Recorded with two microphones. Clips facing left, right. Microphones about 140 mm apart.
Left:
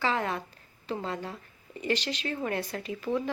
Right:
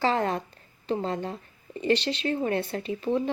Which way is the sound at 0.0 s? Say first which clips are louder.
Right 4 dB; 35° right (ahead or behind).